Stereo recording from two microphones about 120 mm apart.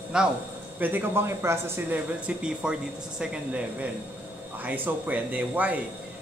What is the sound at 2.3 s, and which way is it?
Speech, 10° right (ahead or behind).